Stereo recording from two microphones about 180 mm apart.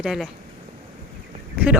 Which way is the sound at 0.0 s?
Centre (ahead or behind).